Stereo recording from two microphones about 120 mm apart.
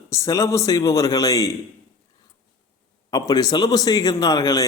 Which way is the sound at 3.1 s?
35° left (ahead or behind).